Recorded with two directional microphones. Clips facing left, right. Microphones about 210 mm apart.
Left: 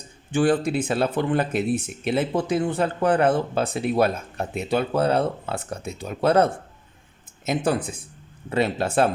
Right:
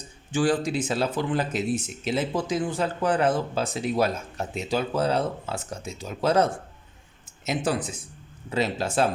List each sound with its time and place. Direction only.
0.3 s speech: 60° left (ahead or behind)